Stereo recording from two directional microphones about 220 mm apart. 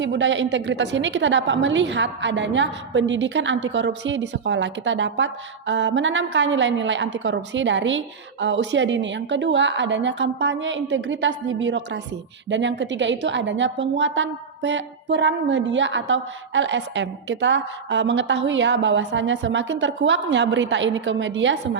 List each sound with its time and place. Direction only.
0.0 s a woman's voice: 55° right (ahead or behind)